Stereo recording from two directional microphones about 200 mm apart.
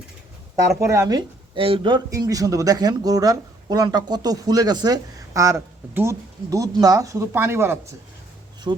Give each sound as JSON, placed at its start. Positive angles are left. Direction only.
{"t": 0.8, "sound": "speech", "side_deg": -15}